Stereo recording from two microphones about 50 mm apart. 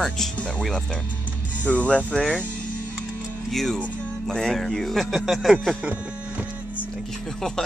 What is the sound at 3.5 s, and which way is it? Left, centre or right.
Speech, centre.